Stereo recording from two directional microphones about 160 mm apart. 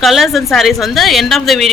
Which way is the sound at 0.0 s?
Centre (ahead or behind).